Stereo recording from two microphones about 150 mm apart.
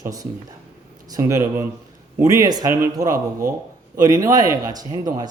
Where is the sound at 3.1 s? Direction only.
70° right (ahead or behind).